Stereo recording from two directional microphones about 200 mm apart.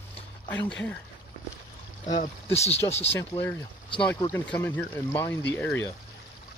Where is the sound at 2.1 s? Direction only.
35° left (ahead or behind).